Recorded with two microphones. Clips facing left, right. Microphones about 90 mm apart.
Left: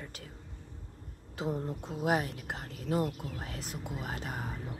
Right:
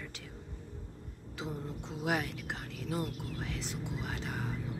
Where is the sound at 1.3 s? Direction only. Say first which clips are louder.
Left 6 dB; 40° left (ahead or behind).